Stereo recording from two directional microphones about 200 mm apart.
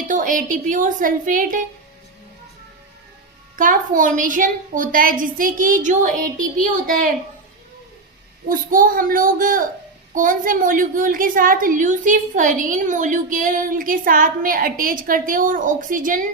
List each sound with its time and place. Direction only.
0.1 s a woman's voice: 40° right (ahead or behind)
3.5 s a woman's voice: 40° right (ahead or behind)
8.4 s a woman's voice: 45° right (ahead or behind)